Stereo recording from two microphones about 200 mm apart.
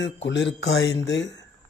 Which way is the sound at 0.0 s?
60° left (ahead or behind).